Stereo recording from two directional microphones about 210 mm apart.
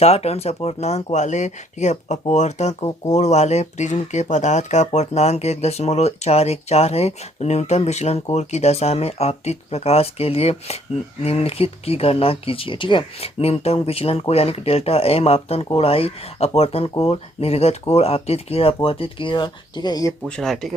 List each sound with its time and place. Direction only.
0.0 s speech: 30° left (ahead or behind)
20.2 s speech: 5° left (ahead or behind)